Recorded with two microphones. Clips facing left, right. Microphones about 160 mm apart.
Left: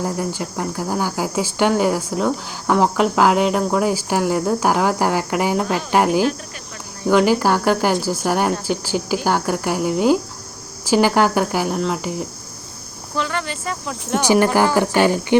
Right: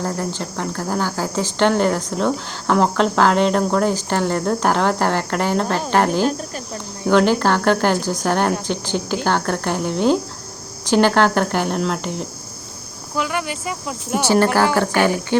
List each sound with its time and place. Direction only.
0.0 s speech: 10° left (ahead or behind)
13.1 s speech: 10° right (ahead or behind)
14.2 s speech: 15° left (ahead or behind)